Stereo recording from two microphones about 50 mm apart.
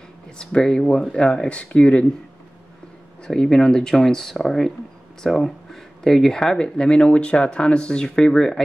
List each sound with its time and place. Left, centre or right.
0.4 s speech: centre
3.3 s speech: centre